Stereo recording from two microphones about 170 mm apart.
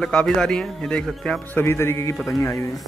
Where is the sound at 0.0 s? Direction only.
5° left (ahead or behind).